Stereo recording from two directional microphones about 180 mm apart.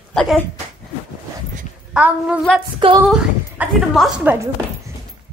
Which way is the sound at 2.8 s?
30° right (ahead or behind).